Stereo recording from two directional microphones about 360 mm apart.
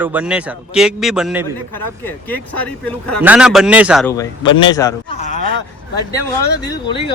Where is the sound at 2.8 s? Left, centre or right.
Centre.